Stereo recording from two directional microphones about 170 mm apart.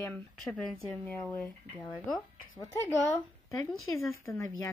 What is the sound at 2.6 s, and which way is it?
Speech, 15° left (ahead or behind).